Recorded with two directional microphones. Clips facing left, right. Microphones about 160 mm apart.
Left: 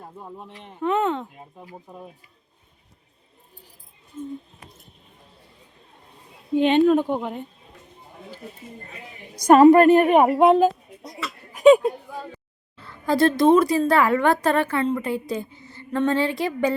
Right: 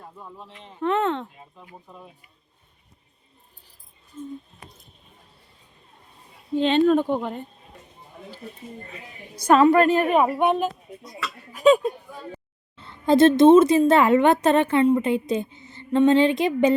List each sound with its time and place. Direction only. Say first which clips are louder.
0.0 s a sound: left 3 dB; 35° left (ahead or behind)
0.4 s speech: left 3 dB; 55° left (ahead or behind)
0.8 s speech: even; 5° left (ahead or behind)
1.5 s speech: left 5 dB; 25° left (ahead or behind)
4.1 s speech: left 2 dB; 20° left (ahead or behind)
6.5 s speech: left 2 dB; 15° left (ahead or behind)
9.3 s speech: left 3 dB; 15° left (ahead or behind)
9.7 s a woman's voice: left 4 dB; 55° left (ahead or behind)
10.0 s speech: left 4 dB; 20° left (ahead or behind)
11.1 s a sound: left 1 dB; 10° left (ahead or behind)
12.7 s a woman's voice: right 4 dB; 25° right (ahead or behind)